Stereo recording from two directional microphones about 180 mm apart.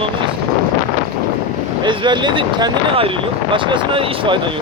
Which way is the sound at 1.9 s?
25° right (ahead or behind).